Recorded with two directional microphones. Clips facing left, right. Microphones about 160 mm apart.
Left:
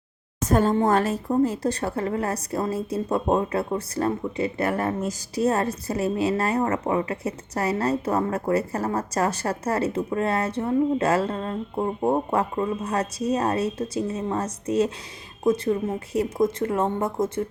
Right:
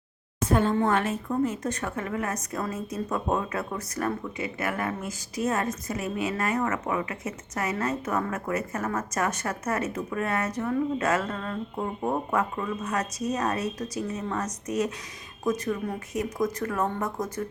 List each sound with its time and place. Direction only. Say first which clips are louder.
0.4 s a woman's voice: left 3 dB; 40° left (ahead or behind)